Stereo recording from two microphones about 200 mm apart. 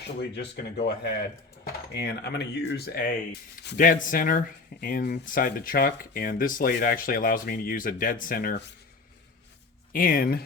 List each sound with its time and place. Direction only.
0.2 s speech: 60° left (ahead or behind)
9.9 s speech: 45° left (ahead or behind)